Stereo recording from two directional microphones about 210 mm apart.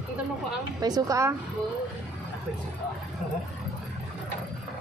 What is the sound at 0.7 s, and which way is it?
Speech, 15° right (ahead or behind).